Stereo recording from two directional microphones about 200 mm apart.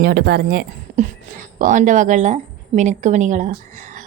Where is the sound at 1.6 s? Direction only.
40° right (ahead or behind).